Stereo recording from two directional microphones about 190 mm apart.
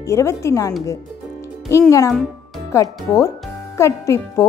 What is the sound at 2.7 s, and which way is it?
A woman's voice, 15° left (ahead or behind).